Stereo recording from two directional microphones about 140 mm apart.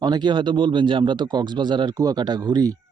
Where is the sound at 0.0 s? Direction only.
30° right (ahead or behind).